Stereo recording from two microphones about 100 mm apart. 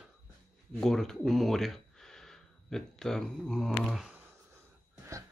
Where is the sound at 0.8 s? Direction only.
5° left (ahead or behind).